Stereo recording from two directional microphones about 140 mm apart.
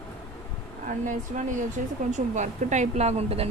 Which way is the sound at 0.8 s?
65° right (ahead or behind).